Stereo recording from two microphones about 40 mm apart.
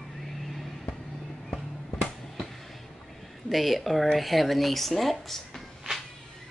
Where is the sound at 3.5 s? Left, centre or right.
Centre.